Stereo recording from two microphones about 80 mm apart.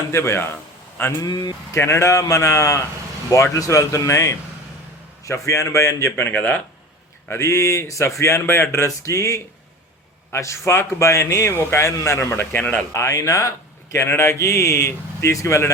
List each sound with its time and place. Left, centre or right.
0.1 s a man's voice: left
7.3 s a man's voice: left; by 12.8 s centre
12.9 s a man's voice: left